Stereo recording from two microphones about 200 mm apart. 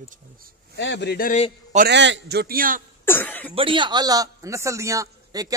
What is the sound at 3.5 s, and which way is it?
A man's voice, 25° right (ahead or behind).